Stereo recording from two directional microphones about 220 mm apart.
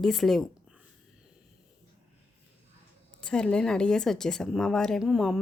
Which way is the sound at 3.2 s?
5° left (ahead or behind).